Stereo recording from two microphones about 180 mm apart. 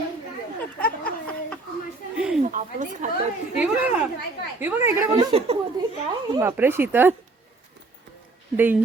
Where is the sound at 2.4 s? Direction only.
45° right (ahead or behind).